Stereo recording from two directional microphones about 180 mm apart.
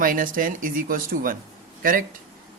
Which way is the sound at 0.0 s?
50° right (ahead or behind).